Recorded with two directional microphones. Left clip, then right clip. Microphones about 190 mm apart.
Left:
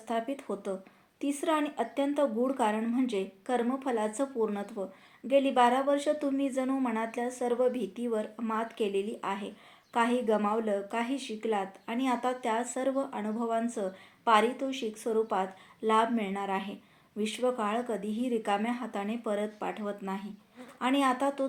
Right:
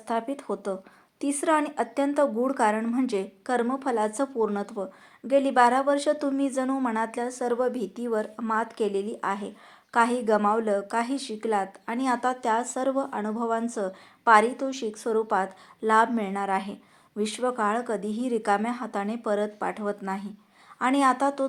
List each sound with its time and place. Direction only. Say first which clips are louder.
0.1 s speech: right 4 dB; 20° right (ahead or behind)